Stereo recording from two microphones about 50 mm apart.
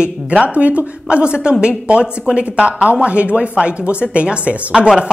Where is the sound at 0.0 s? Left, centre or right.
Centre.